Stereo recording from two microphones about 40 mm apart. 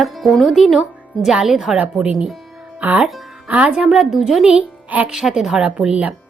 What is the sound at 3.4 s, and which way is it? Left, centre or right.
Speech, right.